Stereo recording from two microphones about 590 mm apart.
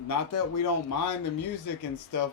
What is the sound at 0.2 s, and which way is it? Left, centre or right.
Speech, left.